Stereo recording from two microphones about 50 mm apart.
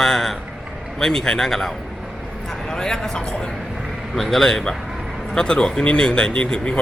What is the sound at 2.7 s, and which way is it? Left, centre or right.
A man's voice, centre.